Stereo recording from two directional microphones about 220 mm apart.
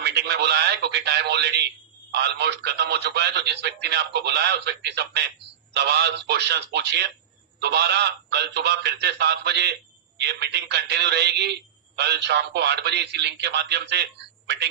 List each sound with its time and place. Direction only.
0.0 s speech: 50° right (ahead or behind)